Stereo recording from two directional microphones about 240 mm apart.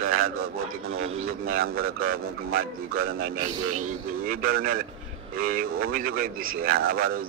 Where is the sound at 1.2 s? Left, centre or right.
Right.